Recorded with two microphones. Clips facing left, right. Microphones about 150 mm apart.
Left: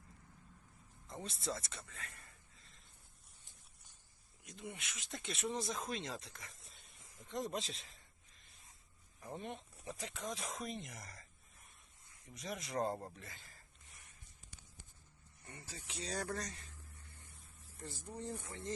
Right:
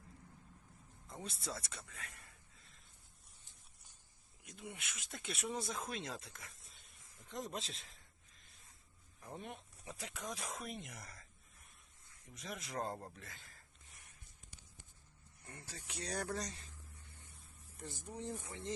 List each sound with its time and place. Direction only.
1.0 s a sound: 5° right (ahead or behind)
4.4 s speech: 5° right (ahead or behind)
12.3 s speech: centre (ahead or behind)
15.4 s speech: centre (ahead or behind)
16.2 s a sound: 15° right (ahead or behind)
17.8 s speech: 15° right (ahead or behind)